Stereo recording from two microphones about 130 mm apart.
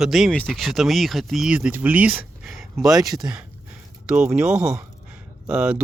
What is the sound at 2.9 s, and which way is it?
Speech, 30° right (ahead or behind).